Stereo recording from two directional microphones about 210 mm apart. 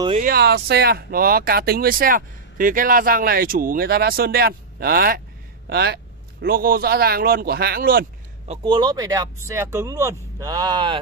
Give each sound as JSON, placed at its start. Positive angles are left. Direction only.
{"t": 0.2, "sound": "speech", "side_deg": -50}
{"t": 8.5, "sound": "speech", "side_deg": -20}